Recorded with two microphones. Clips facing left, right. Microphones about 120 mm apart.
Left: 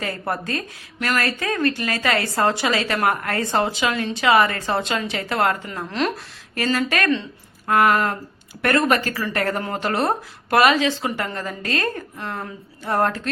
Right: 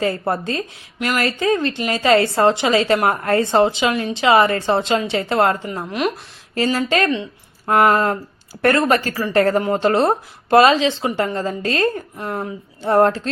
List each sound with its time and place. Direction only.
0.0 s a woman's voice: 25° right (ahead or behind)